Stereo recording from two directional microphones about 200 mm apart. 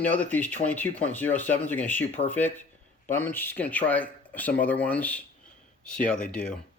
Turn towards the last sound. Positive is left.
turn(degrees=5)  # may be behind; listen again after turning